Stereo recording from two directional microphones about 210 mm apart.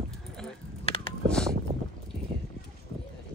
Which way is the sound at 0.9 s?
30° left (ahead or behind).